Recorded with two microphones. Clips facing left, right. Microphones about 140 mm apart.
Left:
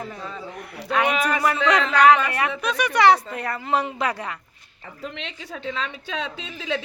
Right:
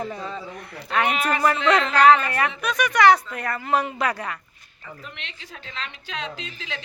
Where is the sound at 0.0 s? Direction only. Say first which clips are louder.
Right 3 dB; centre (ahead or behind); by 4.4 s 25° left (ahead or behind).